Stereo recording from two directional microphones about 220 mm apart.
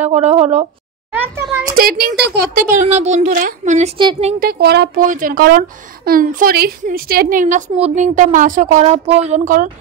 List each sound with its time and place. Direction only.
0.0 s speech: 30° right (ahead or behind)
1.1 s a sound: 10° right (ahead or behind)
1.8 s a woman's voice: 40° right (ahead or behind); by 4.4 s 25° right (ahead or behind)
4.4 s a woman's voice: 45° right (ahead or behind)